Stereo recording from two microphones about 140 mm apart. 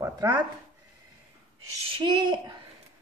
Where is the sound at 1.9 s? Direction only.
35° right (ahead or behind).